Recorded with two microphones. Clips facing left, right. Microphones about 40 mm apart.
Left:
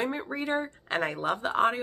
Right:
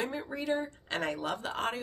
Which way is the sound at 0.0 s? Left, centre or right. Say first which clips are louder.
Left 4 dB; left.